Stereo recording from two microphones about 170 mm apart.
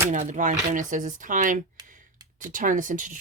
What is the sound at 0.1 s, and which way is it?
Speech, 45° right (ahead or behind).